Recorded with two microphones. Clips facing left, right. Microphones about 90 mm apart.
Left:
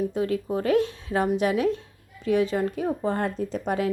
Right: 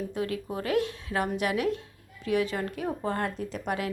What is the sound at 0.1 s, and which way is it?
A woman's voice, 25° left (ahead or behind).